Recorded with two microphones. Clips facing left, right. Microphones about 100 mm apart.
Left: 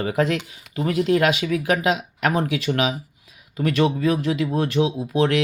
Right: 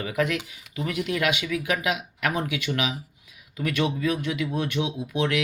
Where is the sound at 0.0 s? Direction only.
30° left (ahead or behind).